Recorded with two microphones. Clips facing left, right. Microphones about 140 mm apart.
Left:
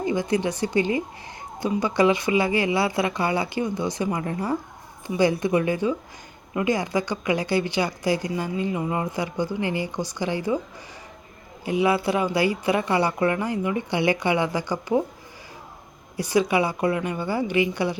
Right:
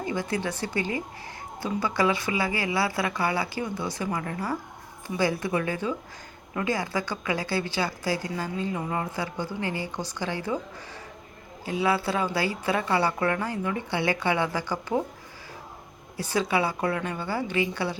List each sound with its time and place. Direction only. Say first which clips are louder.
0.0 s a woman's voice: left 5 dB; 20° left (ahead or behind)
11.6 s a woman's voice: left 4 dB; 15° left (ahead or behind)
16.1 s a woman's voice: left 5 dB; 15° left (ahead or behind)